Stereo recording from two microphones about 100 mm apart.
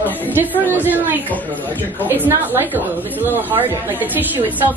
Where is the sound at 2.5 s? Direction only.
20° right (ahead or behind).